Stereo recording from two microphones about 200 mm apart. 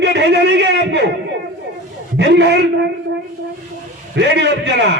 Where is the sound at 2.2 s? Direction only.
60° right (ahead or behind).